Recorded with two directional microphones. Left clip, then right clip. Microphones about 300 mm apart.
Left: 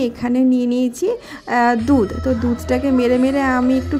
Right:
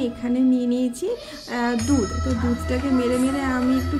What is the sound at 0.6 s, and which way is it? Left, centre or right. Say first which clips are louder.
Speech: left 5 dB; left.